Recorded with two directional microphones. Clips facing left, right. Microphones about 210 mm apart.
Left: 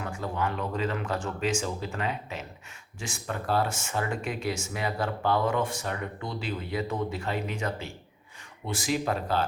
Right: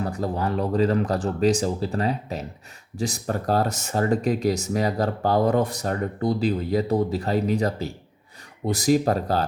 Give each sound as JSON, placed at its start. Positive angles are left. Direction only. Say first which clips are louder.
{"t": 0.0, "sound": "speech", "louder": "right 5 dB", "side_deg": -35}